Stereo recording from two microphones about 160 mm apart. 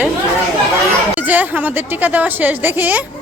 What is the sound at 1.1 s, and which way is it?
Speech, 10° right (ahead or behind).